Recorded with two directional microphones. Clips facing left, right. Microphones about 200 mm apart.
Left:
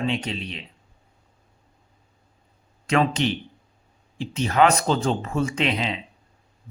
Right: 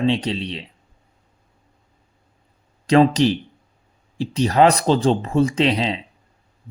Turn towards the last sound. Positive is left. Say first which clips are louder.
# right 5 dB
turn(degrees=-35)  # may be behind; listen again after turning